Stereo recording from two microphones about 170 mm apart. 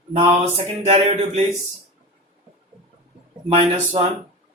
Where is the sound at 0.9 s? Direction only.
35° right (ahead or behind).